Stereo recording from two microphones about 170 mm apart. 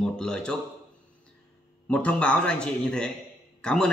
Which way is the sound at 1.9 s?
10° left (ahead or behind).